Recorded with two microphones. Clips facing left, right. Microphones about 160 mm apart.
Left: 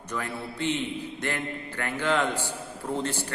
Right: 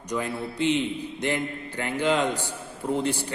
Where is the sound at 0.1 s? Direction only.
15° right (ahead or behind).